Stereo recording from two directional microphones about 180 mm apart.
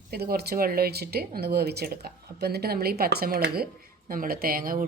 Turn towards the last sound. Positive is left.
turn(degrees=-50)  # may be behind; listen again after turning